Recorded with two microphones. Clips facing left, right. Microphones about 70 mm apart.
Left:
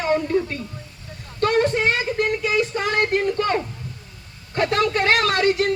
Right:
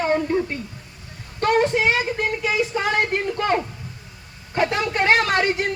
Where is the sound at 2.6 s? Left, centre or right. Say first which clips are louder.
Right 1 dB; centre.